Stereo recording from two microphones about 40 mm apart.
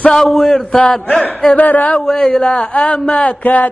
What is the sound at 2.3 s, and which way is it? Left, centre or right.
Speech, left.